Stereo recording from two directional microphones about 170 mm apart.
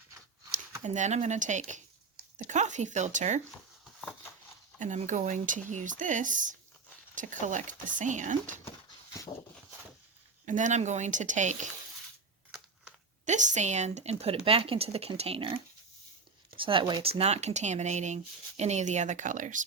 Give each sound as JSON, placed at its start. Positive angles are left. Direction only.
{"t": 0.9, "sound": "speech", "side_deg": -45}
{"t": 4.8, "sound": "speech", "side_deg": -45}
{"t": 10.4, "sound": "speech", "side_deg": -45}
{"t": 12.5, "sound": "a sound", "side_deg": -5}
{"t": 13.2, "sound": "speech", "side_deg": -45}
{"t": 16.6, "sound": "speech", "side_deg": -30}